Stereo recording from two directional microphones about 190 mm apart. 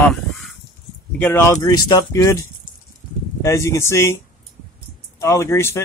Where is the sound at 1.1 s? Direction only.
10° left (ahead or behind).